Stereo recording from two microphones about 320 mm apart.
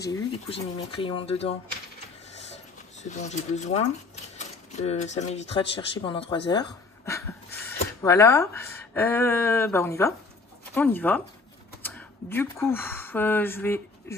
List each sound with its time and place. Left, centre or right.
0.1 s speech: centre
3.0 s speech: left
6.5 s a sound: centre
7.8 s speech: centre